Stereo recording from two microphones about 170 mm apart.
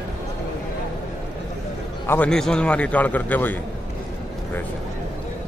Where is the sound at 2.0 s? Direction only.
10° left (ahead or behind).